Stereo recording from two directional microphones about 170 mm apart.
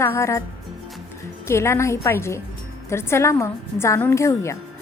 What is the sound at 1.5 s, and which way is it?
A woman's voice, 15° left (ahead or behind).